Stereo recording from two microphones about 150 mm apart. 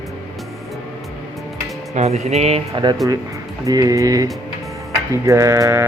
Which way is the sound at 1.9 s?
50° right (ahead or behind).